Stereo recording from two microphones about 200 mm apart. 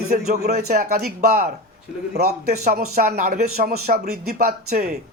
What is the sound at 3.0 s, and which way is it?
Speech, 45° right (ahead or behind).